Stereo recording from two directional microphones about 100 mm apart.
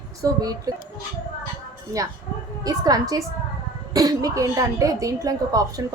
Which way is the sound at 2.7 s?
40° right (ahead or behind).